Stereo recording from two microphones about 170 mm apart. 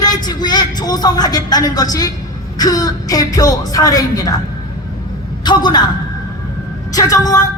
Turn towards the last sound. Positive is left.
turn(degrees=20)  # may be behind; listen again after turning